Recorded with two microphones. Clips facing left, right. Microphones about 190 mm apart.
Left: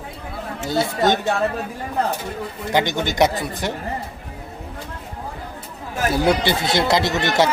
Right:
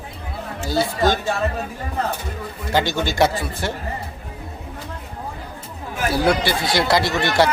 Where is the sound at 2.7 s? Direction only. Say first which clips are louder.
Even; 20° left (ahead or behind).